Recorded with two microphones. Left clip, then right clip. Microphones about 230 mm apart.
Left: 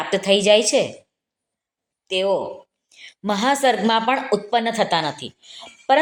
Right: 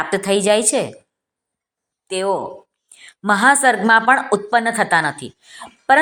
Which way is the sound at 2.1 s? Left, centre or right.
Right.